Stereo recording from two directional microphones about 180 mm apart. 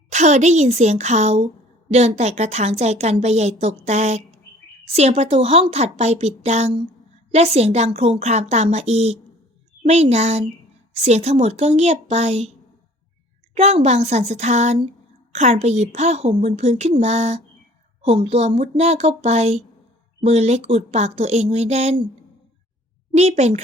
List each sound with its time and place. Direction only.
0.1 s a woman's voice: 40° right (ahead or behind)
13.5 s a woman's voice: 35° right (ahead or behind)
23.1 s a woman's voice: 35° right (ahead or behind)